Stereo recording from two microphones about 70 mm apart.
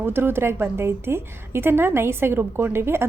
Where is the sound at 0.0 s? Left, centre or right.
Right.